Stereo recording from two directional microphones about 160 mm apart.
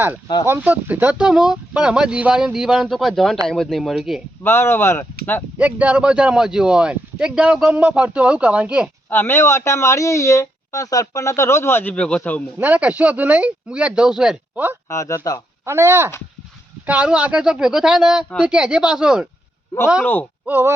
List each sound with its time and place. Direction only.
0.4 s speech: 15° right (ahead or behind)
4.4 s speech: 15° left (ahead or behind)
5.5 s speech: 10° right (ahead or behind)
9.0 s speech: 15° left (ahead or behind)
12.5 s speech: 10° right (ahead or behind)
14.8 s speech: 20° left (ahead or behind)
15.6 s speech: 15° right (ahead or behind)
20.5 s speech: 15° right (ahead or behind)